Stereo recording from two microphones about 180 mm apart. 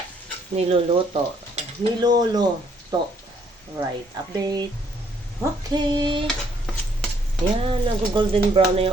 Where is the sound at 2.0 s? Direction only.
25° right (ahead or behind).